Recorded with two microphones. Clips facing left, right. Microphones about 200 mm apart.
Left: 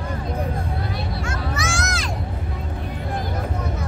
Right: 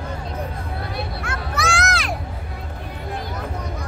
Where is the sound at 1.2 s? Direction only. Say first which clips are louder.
Right 2 dB; 60° right (ahead or behind).